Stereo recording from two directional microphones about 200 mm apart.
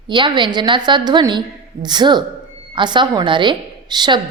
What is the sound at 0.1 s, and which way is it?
A woman's voice, 25° right (ahead or behind).